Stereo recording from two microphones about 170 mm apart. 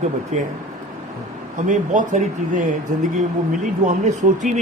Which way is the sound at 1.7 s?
50° right (ahead or behind).